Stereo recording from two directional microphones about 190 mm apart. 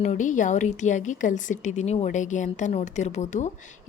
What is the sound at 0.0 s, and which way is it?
A woman's voice, 40° left (ahead or behind).